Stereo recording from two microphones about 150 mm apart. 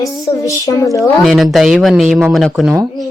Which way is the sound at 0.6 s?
20° left (ahead or behind).